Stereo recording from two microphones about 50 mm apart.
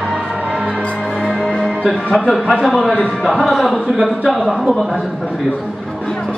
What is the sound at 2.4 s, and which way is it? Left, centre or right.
Speech, centre.